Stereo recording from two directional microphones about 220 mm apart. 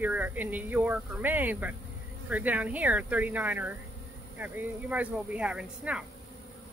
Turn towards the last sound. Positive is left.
turn(degrees=-5)  # may be behind; listen again after turning